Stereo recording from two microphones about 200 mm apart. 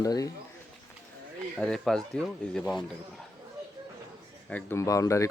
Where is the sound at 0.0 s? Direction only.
15° left (ahead or behind).